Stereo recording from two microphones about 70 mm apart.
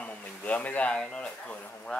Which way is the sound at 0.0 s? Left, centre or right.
Left.